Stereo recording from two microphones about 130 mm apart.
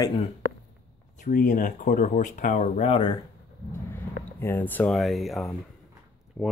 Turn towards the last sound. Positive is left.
turn(degrees=-5)  # may be behind; listen again after turning